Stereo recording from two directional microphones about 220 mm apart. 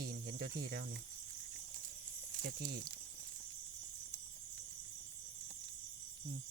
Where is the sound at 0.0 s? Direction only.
40° right (ahead or behind).